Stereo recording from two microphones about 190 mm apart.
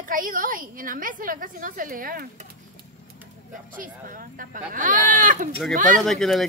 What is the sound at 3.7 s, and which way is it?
A woman's voice, 45° right (ahead or behind).